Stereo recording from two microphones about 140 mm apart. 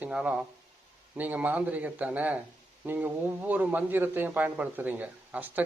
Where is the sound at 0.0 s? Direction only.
10° right (ahead or behind).